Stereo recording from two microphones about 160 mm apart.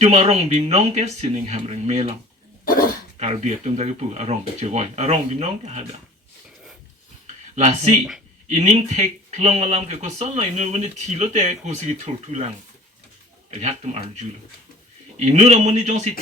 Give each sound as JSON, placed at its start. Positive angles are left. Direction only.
{"t": 0.0, "sound": "speech", "side_deg": -45}
{"t": 2.6, "sound": "dog", "side_deg": 65}
{"t": 3.2, "sound": "speech", "side_deg": -45}
{"t": 7.5, "sound": "speech", "side_deg": -45}
{"t": 13.5, "sound": "speech", "side_deg": -45}
{"t": 15.2, "sound": "speech", "side_deg": -45}